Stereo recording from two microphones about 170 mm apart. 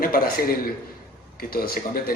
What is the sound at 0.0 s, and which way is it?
Speech, 60° left (ahead or behind).